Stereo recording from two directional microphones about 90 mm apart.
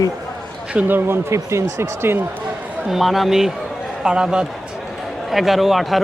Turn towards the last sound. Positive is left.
turn(degrees=0)  # may be behind; listen again after turning